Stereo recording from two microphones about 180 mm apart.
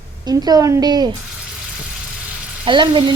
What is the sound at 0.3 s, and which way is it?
Speech, 20° right (ahead or behind).